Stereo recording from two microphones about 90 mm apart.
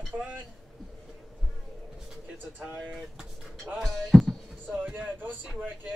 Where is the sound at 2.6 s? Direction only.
15° right (ahead or behind).